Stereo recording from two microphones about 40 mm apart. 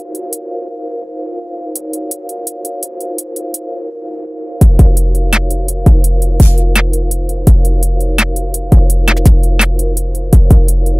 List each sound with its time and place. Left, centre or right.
4.6 s music: centre
5.3 s music: centre
5.9 s music: centre
6.7 s music: centre
7.4 s music: centre
9.1 s music: centre
10.3 s music: centre